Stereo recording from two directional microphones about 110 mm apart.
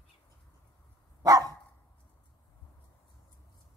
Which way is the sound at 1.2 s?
35° right (ahead or behind).